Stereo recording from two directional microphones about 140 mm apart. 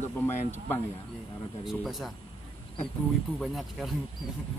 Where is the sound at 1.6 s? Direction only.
Centre (ahead or behind).